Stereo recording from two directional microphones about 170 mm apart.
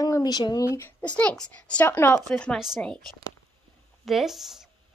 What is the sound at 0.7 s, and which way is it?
A child's voice, 15° left (ahead or behind).